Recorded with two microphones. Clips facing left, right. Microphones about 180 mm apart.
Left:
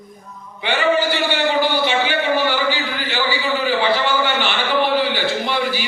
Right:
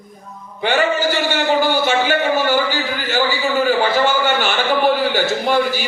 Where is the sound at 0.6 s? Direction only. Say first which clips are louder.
Right 1 dB; 45° right (ahead or behind).